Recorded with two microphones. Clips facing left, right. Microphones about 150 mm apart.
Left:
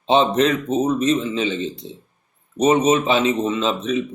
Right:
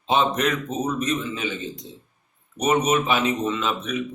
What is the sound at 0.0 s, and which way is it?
Speech, 25° left (ahead or behind).